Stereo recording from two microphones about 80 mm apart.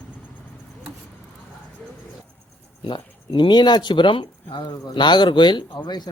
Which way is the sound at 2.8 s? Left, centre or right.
Left.